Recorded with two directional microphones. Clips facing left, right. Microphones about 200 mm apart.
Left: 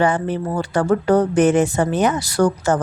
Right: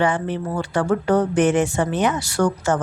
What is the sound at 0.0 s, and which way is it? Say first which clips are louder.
Speech: left 2 dB; 40° left (ahead or behind).